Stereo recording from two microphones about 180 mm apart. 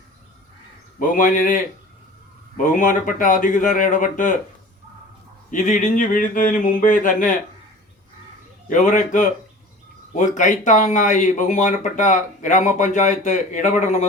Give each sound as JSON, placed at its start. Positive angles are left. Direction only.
{"t": 0.9, "sound": "speech", "side_deg": 50}
{"t": 5.5, "sound": "speech", "side_deg": 45}
{"t": 8.6, "sound": "speech", "side_deg": 45}